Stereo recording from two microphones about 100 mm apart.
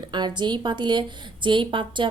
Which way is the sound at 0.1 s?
50° right (ahead or behind).